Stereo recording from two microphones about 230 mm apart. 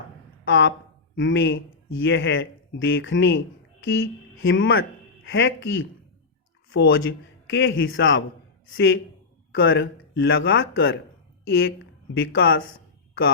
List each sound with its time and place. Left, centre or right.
0.4 s speech: left
11.4 s a woman's voice: left
12.1 s speech: left